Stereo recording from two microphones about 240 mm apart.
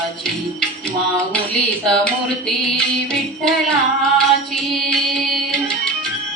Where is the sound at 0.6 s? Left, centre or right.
Centre.